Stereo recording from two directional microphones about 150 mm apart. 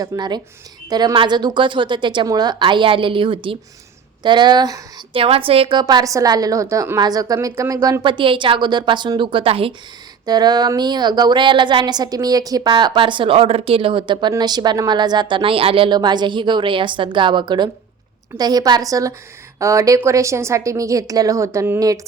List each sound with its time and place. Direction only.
0.0 s speech: 30° right (ahead or behind)
5.2 s speech: 40° right (ahead or behind)
10.2 s speech: 25° right (ahead or behind)